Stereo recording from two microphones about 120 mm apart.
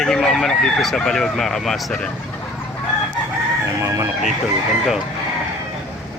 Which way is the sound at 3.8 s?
25° right (ahead or behind).